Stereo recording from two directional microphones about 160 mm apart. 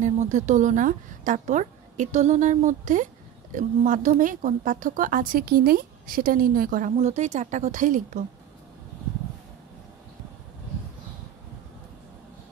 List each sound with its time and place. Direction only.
0.0 s a woman's voice: 50° right (ahead or behind)